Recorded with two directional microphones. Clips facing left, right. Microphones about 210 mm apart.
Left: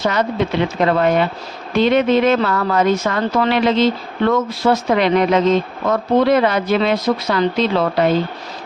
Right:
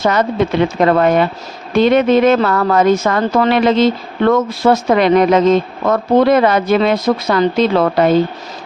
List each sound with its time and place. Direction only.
0.0 s speech: 50° right (ahead or behind)